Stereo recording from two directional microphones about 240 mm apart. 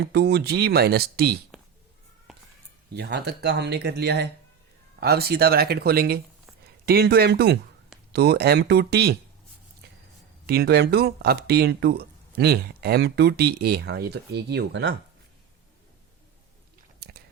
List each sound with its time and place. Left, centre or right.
0.0 s speech: right
2.9 s speech: right
9.8 s a sound: right
10.4 s speech: right
17.0 s biting: right